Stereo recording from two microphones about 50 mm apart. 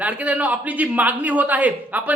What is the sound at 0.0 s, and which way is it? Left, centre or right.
A man's voice, right.